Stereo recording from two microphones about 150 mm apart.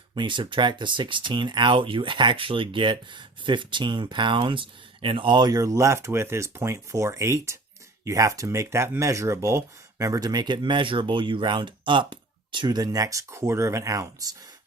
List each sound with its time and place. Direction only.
0.1 s speech: 30° right (ahead or behind)